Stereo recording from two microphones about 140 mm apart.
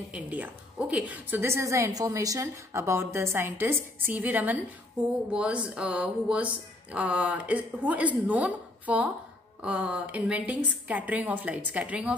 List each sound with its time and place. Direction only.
0.1 s a woman's voice: 10° right (ahead or behind)